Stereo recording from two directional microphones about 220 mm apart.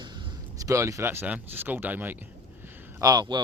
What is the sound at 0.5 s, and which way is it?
Speech, 15° right (ahead or behind).